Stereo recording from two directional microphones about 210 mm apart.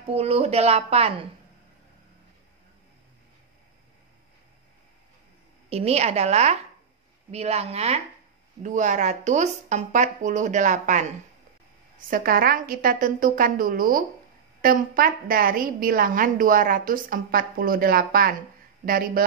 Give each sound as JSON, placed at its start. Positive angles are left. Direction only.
{"t": 0.0, "sound": "speech", "side_deg": -30}
{"t": 5.7, "sound": "a woman's voice", "side_deg": -30}